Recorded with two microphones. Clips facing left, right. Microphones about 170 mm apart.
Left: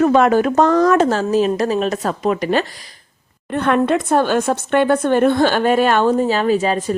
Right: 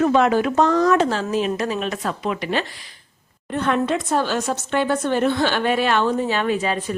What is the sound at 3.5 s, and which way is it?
A woman's voice, 60° left (ahead or behind).